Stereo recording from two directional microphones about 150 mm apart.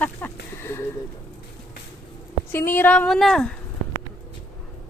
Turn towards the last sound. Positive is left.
turn(degrees=5)  # may be behind; listen again after turning